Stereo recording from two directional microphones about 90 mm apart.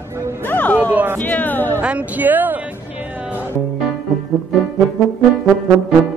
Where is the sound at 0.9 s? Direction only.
25° right (ahead or behind).